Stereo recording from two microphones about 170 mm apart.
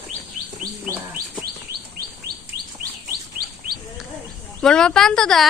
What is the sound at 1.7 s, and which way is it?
Chirp, 65° right (ahead or behind).